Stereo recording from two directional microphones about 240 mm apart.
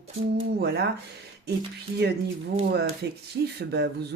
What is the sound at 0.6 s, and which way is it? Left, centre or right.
Speech, right.